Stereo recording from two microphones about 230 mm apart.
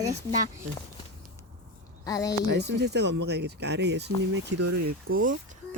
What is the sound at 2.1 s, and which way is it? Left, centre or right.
Speech, centre.